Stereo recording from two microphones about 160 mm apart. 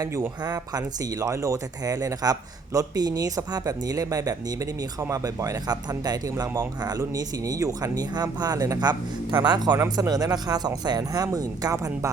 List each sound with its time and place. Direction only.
0.0 s speech: 20° right (ahead or behind)